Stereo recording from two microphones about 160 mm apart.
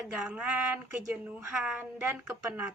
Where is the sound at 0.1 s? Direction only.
5° right (ahead or behind).